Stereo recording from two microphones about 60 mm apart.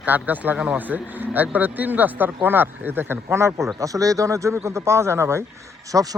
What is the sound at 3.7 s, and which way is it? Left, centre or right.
Speech, right.